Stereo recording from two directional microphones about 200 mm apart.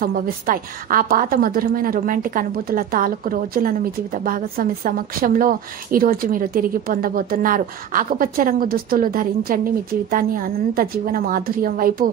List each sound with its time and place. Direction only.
0.0 s a woman's voice: 45° right (ahead or behind)